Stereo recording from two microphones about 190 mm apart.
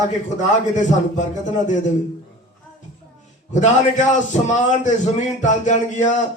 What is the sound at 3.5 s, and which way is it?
Speech, 40° left (ahead or behind).